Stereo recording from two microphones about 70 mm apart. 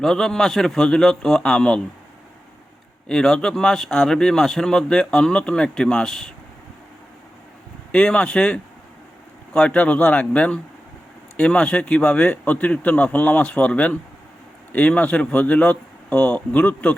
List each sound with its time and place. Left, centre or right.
0.0 s speech: centre
3.1 s speech: centre
7.9 s speech: centre